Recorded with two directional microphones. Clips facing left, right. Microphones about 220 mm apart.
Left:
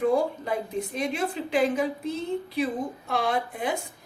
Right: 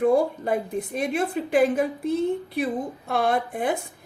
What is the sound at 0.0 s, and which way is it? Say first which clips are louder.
Speech: right 3 dB; 50° right (ahead or behind).